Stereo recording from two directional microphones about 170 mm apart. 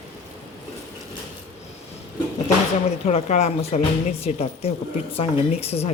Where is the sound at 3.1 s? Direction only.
40° left (ahead or behind).